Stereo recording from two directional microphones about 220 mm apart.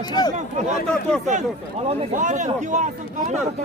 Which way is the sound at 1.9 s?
30° right (ahead or behind).